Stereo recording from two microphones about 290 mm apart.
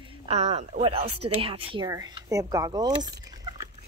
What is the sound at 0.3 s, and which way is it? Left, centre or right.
A woman's voice, right.